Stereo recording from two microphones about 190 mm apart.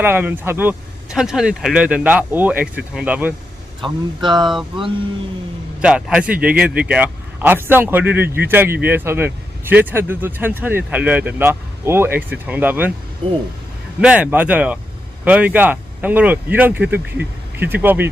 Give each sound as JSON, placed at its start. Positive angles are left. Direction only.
{"t": 0.0, "sound": "speech", "side_deg": -10}
{"t": 4.2, "sound": "speech", "side_deg": -25}
{"t": 5.8, "sound": "speech", "side_deg": -5}
{"t": 14.0, "sound": "speech", "side_deg": -5}